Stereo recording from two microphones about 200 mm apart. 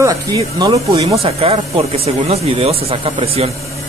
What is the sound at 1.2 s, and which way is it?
Speech, 30° right (ahead or behind).